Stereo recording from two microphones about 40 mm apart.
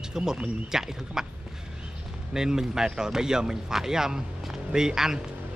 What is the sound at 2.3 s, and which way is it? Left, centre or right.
Speech, centre.